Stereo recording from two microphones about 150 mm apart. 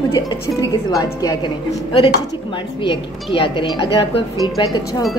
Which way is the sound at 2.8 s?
35° left (ahead or behind).